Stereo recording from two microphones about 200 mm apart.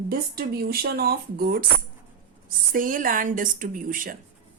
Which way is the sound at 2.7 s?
45° right (ahead or behind).